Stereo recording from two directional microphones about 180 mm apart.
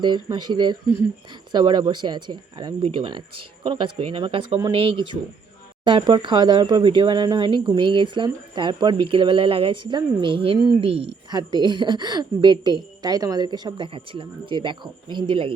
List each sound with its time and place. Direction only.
0.0 s speech: 25° right (ahead or behind)